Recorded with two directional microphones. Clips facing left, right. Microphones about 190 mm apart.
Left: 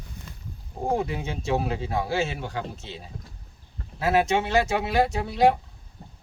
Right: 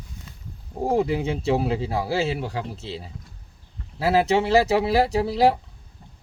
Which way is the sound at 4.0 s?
30° right (ahead or behind).